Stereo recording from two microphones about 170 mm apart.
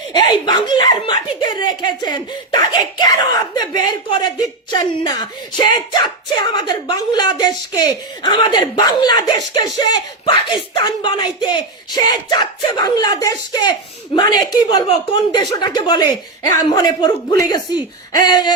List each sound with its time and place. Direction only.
0.3 s speech: 25° left (ahead or behind)